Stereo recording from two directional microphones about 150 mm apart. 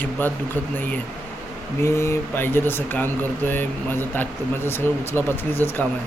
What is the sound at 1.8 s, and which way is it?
Speech, 20° left (ahead or behind).